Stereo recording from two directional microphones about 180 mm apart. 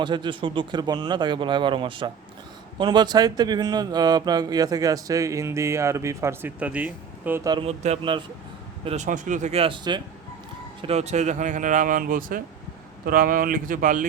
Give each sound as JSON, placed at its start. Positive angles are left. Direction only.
{"t": 0.0, "sound": "speech", "side_deg": -25}
{"t": 7.5, "sound": "speech", "side_deg": -35}
{"t": 10.8, "sound": "speech", "side_deg": -35}